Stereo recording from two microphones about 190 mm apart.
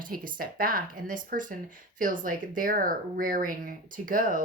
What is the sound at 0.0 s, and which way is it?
Speech, 45° right (ahead or behind).